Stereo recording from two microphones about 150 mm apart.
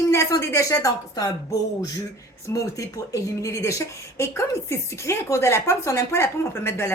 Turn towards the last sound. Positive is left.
turn(degrees=15)  # may be behind; listen again after turning